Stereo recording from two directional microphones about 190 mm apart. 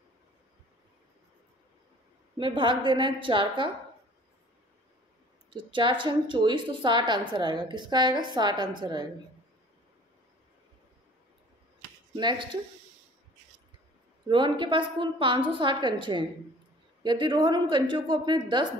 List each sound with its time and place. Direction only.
2.3 s a woman's voice: 25° right (ahead or behind)
5.5 s a woman's voice: 25° right (ahead or behind)
12.2 s a woman's voice: 25° right (ahead or behind)
14.2 s a woman's voice: 25° right (ahead or behind)